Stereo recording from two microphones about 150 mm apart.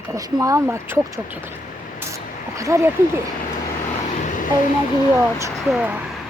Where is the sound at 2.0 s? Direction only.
20° right (ahead or behind).